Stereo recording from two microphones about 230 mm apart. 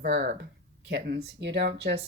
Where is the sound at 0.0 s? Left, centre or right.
Right.